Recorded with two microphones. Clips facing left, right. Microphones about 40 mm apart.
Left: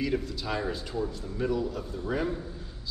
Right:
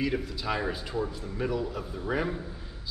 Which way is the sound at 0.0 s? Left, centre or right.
Centre.